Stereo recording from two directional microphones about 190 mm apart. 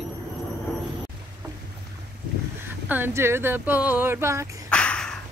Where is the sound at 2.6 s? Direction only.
10° right (ahead or behind).